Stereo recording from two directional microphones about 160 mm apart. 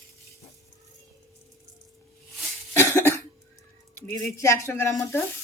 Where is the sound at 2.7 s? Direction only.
15° left (ahead or behind).